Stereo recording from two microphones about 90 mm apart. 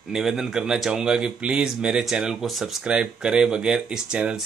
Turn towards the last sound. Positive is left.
turn(degrees=-10)  # may be behind; listen again after turning